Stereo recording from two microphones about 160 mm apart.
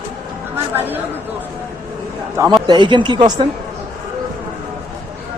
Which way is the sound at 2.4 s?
25° right (ahead or behind).